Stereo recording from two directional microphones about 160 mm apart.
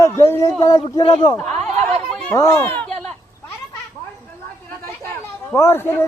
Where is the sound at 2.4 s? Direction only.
15° left (ahead or behind).